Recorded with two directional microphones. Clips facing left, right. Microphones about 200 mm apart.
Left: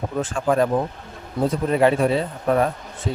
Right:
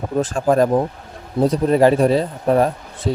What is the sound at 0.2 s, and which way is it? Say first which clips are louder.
Speech: right 4 dB; 40° right (ahead or behind).